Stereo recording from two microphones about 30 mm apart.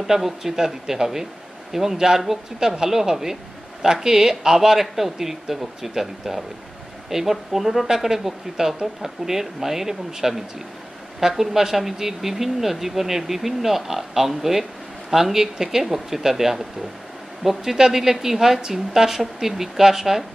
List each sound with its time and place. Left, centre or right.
0.0 s speech: centre